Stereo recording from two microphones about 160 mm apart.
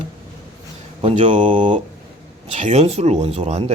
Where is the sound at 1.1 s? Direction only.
50° right (ahead or behind).